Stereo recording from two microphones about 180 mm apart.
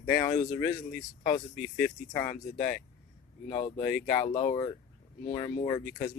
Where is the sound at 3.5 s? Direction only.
30° left (ahead or behind).